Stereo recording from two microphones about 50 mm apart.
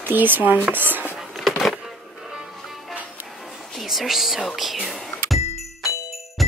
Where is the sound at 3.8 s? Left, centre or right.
Centre.